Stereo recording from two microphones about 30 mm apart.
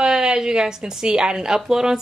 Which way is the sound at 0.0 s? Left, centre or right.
Right.